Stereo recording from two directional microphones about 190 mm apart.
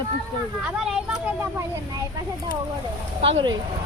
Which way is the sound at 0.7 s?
5° right (ahead or behind).